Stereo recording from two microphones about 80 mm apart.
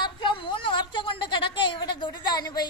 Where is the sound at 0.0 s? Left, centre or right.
Left.